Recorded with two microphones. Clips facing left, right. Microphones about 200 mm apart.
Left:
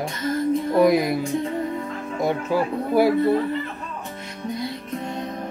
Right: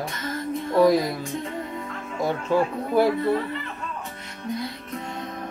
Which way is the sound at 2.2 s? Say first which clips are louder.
Even; 10° left (ahead or behind).